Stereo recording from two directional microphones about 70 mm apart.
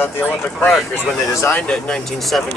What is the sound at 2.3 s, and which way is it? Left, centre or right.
Speech, centre.